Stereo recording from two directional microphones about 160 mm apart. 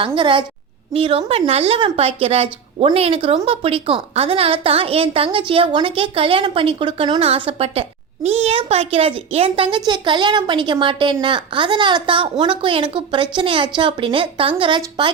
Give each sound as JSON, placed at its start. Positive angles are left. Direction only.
{"t": 0.0, "sound": "a woman's voice", "side_deg": -30}